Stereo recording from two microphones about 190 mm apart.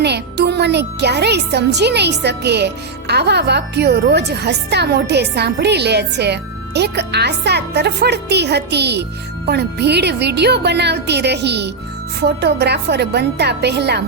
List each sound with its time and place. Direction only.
0.0 s a child's voice: 60° right (ahead or behind)